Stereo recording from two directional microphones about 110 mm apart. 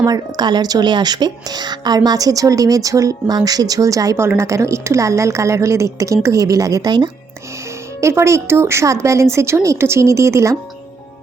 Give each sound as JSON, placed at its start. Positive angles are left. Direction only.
{"t": 0.0, "sound": "speech", "side_deg": -35}
{"t": 8.0, "sound": "speech", "side_deg": -25}